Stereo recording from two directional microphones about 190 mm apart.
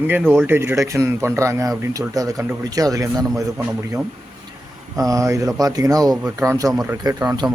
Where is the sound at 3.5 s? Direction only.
5° right (ahead or behind).